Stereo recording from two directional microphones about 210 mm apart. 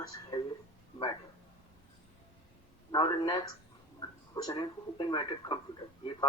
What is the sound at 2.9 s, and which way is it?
Speech, 20° left (ahead or behind).